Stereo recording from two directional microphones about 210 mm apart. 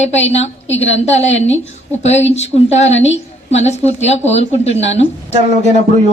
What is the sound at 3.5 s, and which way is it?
A woman's voice, 30° left (ahead or behind).